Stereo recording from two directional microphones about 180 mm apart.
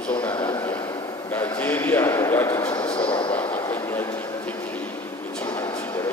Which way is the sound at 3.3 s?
10° left (ahead or behind).